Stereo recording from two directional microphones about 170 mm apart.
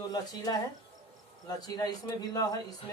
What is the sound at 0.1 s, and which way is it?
Speech, 20° left (ahead or behind).